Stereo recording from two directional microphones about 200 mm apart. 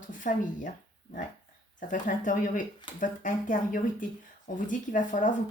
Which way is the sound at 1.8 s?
40° left (ahead or behind).